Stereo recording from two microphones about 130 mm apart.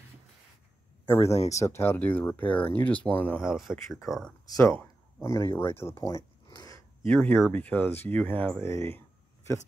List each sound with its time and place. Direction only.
1.0 s speech: 20° left (ahead or behind)
1.3 s speech: 55° left (ahead or behind)
1.6 s speech: 20° left (ahead or behind)
3.3 s speech: 5° right (ahead or behind)
4.6 s a sound: 20° left (ahead or behind)
5.6 s speech: 20° left (ahead or behind)